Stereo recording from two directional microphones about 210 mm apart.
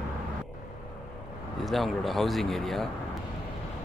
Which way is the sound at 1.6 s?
Centre (ahead or behind).